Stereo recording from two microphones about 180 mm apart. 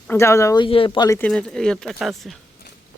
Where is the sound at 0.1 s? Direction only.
15° left (ahead or behind).